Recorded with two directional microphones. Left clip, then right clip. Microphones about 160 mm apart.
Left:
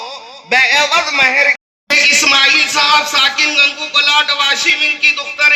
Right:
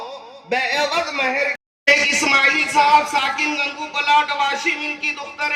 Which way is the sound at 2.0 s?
45° right (ahead or behind).